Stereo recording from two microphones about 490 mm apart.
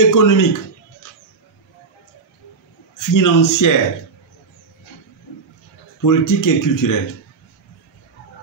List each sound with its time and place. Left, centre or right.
0.1 s speech: left
3.0 s speech: left
6.0 s speech: left